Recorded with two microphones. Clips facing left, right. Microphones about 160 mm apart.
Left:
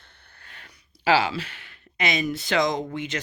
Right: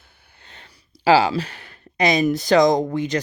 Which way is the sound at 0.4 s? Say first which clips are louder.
Right 2 dB; 25° right (ahead or behind).